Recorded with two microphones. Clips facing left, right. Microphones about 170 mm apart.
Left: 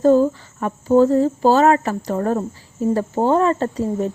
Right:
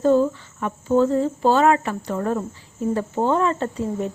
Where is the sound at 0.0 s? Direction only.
40° left (ahead or behind).